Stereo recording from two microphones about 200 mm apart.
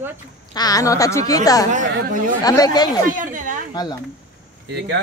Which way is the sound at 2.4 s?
20° left (ahead or behind).